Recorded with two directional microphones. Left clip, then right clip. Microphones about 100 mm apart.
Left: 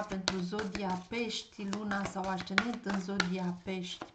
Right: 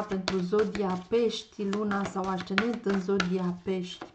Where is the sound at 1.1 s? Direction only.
35° left (ahead or behind).